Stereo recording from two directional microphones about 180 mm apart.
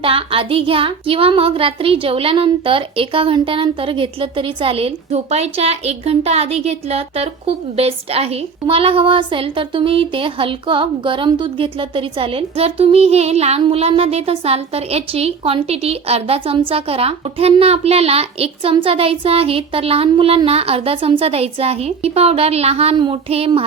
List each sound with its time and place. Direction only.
0.0 s child singing: 30° right (ahead or behind)